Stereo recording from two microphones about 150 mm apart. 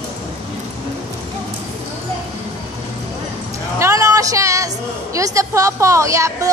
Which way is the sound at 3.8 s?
20° right (ahead or behind).